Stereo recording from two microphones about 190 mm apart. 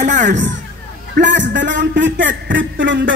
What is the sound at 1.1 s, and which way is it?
Speech, 70° right (ahead or behind).